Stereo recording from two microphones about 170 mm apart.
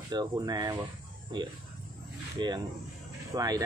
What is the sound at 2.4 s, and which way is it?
Speech, 25° right (ahead or behind).